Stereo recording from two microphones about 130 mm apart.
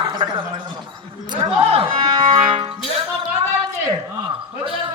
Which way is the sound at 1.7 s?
45° right (ahead or behind).